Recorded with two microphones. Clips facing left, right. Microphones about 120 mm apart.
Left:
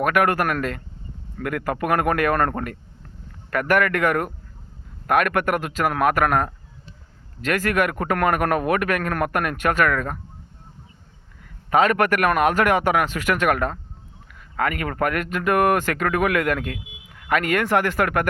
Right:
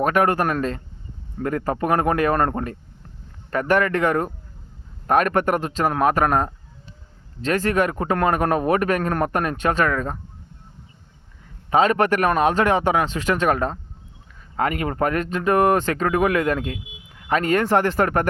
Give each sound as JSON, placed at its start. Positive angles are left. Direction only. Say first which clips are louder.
{"t": 0.0, "sound": "speech", "louder": "right 1 dB", "side_deg": -25}
{"t": 11.7, "sound": "speech", "louder": "right 1 dB", "side_deg": -25}